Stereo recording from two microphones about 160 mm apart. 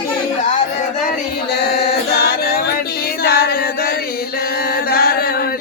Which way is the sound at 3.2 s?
75° left (ahead or behind).